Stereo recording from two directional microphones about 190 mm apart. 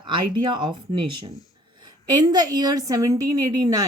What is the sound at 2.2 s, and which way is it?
Speech, 20° right (ahead or behind).